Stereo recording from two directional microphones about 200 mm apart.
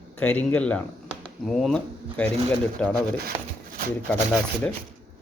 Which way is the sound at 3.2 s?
45° right (ahead or behind).